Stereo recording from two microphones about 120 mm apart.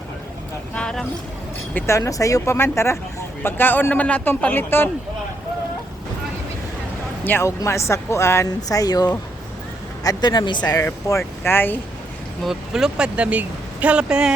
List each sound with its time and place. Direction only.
0.7 s speech: 5° left (ahead or behind)
1.7 s speech: 25° left (ahead or behind)
7.3 s speech: 20° left (ahead or behind)
10.8 s speech: 20° left (ahead or behind)
12.5 s speech: 5° right (ahead or behind)